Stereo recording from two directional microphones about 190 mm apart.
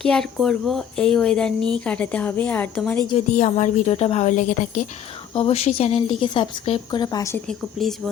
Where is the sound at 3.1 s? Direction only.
35° left (ahead or behind); by 7.4 s 15° left (ahead or behind).